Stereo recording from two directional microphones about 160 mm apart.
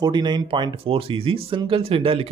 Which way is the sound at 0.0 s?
25° right (ahead or behind).